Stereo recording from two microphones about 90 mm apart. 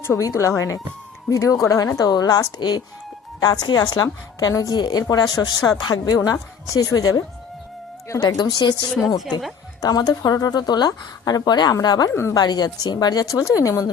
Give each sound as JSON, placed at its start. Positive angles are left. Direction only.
{"t": 0.0, "sound": "speech", "side_deg": 35}
{"t": 8.4, "sound": "speech", "side_deg": 55}
{"t": 12.1, "sound": "speech", "side_deg": 30}
{"t": 12.4, "sound": "speech", "side_deg": 50}